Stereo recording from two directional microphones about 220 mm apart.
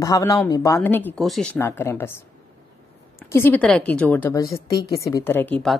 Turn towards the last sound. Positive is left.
turn(degrees=5)  # may be behind; listen again after turning